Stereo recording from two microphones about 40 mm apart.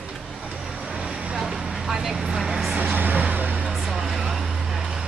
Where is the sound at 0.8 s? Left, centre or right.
Right.